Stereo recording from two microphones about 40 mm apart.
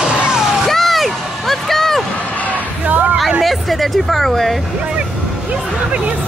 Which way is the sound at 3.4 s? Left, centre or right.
Centre.